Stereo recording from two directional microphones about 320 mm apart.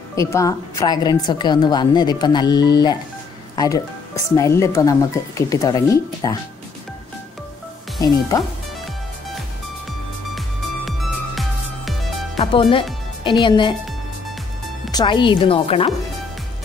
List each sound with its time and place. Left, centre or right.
0.1 s speech: centre
8.0 s speech: centre
10.9 s music: centre
12.4 s speech: centre
14.9 s speech: centre